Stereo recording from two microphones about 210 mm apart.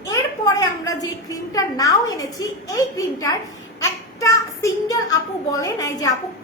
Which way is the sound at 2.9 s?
15° left (ahead or behind).